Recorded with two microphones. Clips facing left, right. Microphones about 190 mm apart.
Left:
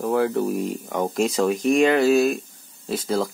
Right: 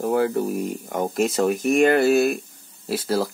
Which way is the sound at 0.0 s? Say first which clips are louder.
Even; 5° right (ahead or behind).